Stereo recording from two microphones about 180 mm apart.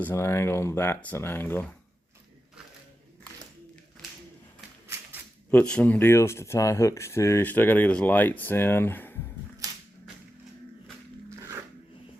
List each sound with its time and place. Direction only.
0.0 s speech: 15° left (ahead or behind)
5.5 s speech: 10° left (ahead or behind)
11.3 s zipper: 15° right (ahead or behind)